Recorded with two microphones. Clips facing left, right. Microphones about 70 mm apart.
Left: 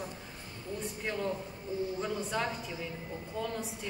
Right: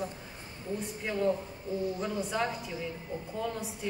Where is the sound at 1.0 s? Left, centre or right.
Centre.